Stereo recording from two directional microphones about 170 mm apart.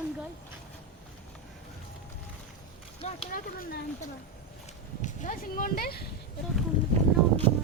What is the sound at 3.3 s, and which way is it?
Speech, 55° left (ahead or behind).